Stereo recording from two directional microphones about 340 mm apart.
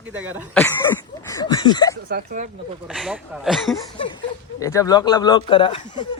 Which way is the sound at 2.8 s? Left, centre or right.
Centre.